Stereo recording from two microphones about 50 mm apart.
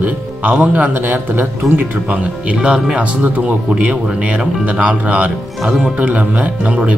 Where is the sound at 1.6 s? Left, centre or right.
Centre.